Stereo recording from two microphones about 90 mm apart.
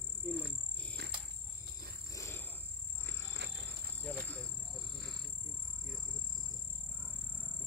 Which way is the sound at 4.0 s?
15° left (ahead or behind).